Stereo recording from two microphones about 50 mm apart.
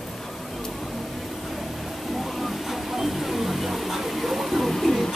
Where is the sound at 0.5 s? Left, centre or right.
Centre.